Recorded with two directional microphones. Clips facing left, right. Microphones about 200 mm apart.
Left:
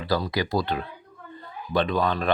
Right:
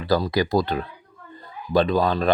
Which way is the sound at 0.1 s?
45° right (ahead or behind).